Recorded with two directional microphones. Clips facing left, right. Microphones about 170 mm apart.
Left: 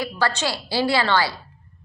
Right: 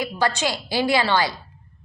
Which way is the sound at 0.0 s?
15° right (ahead or behind).